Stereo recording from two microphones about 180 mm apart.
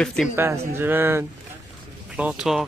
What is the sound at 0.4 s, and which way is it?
Speech, 15° right (ahead or behind).